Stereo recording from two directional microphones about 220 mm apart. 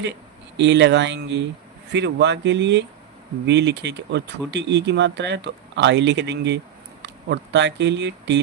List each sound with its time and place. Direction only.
0.5 s speech: 50° right (ahead or behind)